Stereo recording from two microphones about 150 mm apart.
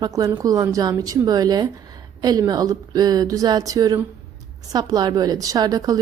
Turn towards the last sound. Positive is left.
turn(degrees=-25)  # may be behind; listen again after turning